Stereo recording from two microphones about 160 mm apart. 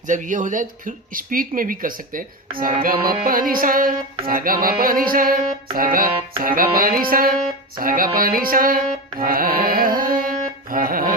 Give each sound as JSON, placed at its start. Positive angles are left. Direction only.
{"t": 0.1, "sound": "music", "side_deg": -50}